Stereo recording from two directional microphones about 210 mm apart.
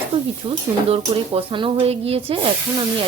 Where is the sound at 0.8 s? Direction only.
25° right (ahead or behind).